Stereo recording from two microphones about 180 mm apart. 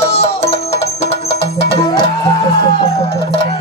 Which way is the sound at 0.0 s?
35° left (ahead or behind).